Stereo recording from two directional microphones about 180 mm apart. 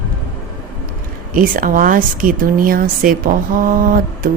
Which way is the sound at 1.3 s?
50° right (ahead or behind).